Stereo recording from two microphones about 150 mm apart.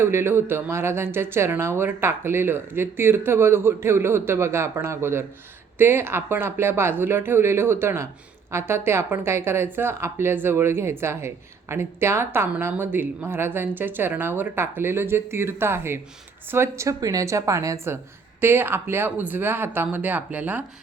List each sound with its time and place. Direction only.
0.0 s speech: 15° right (ahead or behind)